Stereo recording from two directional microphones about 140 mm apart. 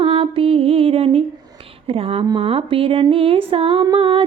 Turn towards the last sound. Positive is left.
turn(degrees=-40)  # may be behind; listen again after turning